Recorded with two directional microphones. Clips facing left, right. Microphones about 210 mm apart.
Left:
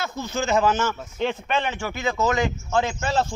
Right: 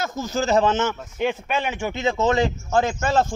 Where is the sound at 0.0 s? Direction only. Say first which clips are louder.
Right 3 dB; 45° right (ahead or behind).